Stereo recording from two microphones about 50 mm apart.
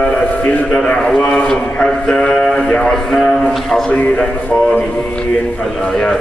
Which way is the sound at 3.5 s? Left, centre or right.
Centre.